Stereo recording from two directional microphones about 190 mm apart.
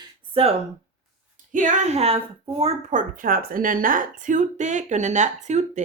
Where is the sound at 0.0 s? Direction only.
30° right (ahead or behind).